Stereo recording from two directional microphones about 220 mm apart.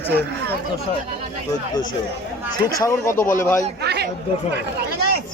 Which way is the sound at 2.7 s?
15° left (ahead or behind).